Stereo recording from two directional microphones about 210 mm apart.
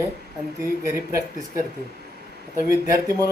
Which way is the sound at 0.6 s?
10° right (ahead or behind).